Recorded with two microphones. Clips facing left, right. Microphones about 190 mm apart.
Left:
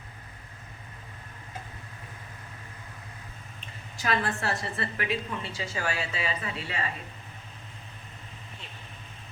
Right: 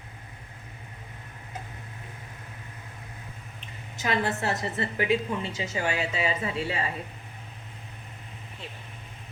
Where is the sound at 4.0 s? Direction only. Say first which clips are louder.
Right 2 dB; 20° right (ahead or behind).